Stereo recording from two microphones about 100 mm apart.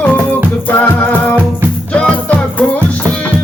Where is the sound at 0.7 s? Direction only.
20° left (ahead or behind).